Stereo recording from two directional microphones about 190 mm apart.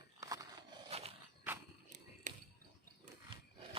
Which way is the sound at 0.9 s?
30° right (ahead or behind).